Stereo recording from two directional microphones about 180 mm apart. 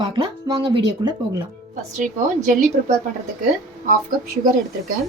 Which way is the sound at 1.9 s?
45° right (ahead or behind).